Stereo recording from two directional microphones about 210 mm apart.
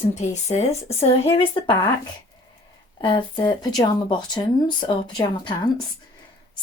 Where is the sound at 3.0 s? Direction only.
20° left (ahead or behind).